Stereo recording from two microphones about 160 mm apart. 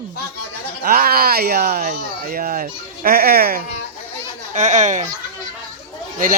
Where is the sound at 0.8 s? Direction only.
65° right (ahead or behind).